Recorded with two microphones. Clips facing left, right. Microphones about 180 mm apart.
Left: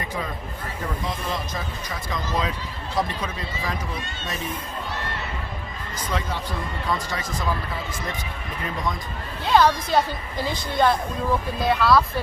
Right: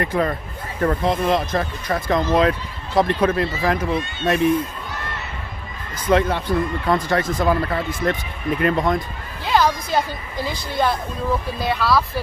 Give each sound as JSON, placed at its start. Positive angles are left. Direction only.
{"t": 0.0, "sound": "speech", "side_deg": -65}
{"t": 6.0, "sound": "speech", "side_deg": -60}
{"t": 9.4, "sound": "a woman's voice", "side_deg": 0}